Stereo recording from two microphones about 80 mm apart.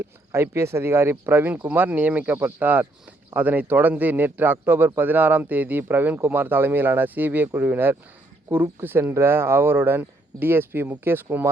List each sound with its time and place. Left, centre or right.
0.0 s speech: right